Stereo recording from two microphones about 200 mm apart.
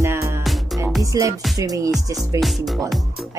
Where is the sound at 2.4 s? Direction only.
Centre (ahead or behind).